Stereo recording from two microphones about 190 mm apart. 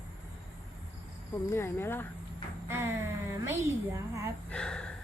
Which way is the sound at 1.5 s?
15° left (ahead or behind).